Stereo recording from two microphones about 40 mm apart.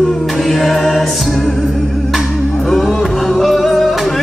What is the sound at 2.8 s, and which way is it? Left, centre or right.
Music, centre.